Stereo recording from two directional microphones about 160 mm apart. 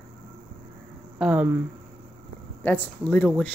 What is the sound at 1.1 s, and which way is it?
Speech, 10° right (ahead or behind).